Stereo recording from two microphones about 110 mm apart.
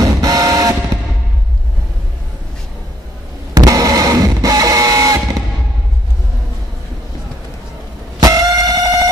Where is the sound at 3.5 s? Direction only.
30° right (ahead or behind).